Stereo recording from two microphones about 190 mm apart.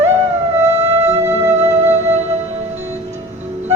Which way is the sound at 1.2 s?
10° right (ahead or behind).